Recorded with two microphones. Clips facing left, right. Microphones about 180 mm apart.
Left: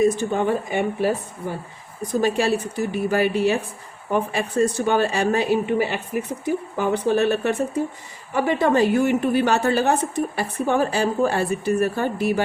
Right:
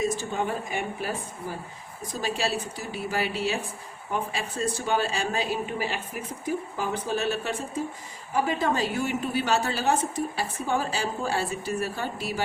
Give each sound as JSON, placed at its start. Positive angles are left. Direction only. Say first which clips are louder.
{"t": 0.0, "sound": "a woman's voice", "louder": "left 8 dB", "side_deg": 60}
{"t": 2.2, "sound": "a woman's voice", "louder": "left 7 dB", "side_deg": 60}